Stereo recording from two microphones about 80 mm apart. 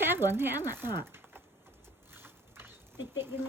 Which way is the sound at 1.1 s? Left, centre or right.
Right.